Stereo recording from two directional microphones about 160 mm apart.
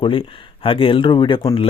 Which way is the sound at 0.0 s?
35° left (ahead or behind).